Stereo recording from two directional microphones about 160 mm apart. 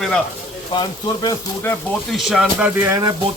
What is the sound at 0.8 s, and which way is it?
Speech, 25° left (ahead or behind).